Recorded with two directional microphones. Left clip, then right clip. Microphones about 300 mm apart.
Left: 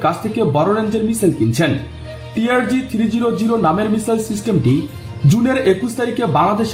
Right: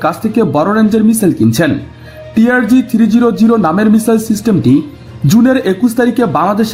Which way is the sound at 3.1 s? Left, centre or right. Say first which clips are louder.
Right 6 dB; right.